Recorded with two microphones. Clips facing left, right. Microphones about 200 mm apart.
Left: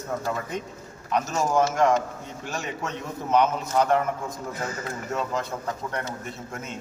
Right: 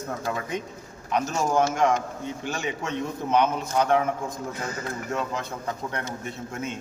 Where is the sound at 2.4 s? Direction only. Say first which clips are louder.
Even; centre (ahead or behind).